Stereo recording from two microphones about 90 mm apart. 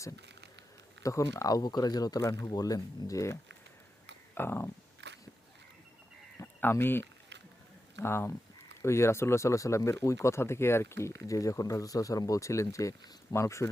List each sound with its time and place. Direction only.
1.0 s speech: 40° left (ahead or behind)
4.4 s speech: 25° left (ahead or behind)
6.4 s speech: 25° left (ahead or behind)